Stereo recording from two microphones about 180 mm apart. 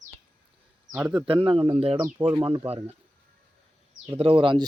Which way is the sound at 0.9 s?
5° right (ahead or behind).